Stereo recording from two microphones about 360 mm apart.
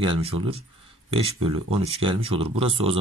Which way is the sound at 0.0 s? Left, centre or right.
Centre.